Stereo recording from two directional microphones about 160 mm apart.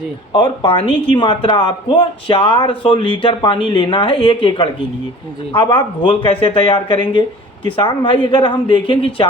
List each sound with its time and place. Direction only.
0.3 s speech: 30° left (ahead or behind)